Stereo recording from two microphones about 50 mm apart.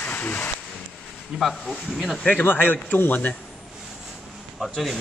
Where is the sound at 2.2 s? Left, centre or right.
Left.